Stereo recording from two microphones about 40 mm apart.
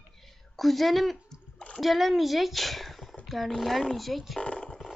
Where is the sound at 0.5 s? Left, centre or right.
Centre.